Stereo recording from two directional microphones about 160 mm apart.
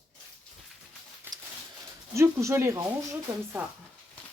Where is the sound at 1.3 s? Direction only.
25° right (ahead or behind).